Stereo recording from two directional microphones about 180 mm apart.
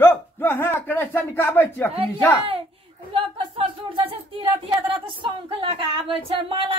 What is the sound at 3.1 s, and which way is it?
Speech, 30° right (ahead or behind).